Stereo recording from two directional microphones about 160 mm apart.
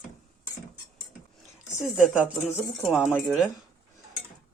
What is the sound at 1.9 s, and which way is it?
Speech, 5° right (ahead or behind).